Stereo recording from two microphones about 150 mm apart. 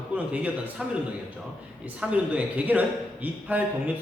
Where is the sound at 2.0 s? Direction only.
10° right (ahead or behind).